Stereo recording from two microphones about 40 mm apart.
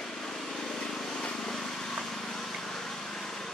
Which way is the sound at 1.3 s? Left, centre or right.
Centre.